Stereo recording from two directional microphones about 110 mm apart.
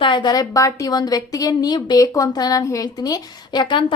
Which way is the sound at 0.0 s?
45° left (ahead or behind).